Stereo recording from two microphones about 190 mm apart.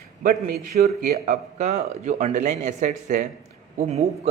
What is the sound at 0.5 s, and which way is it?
A man's voice, 45° right (ahead or behind).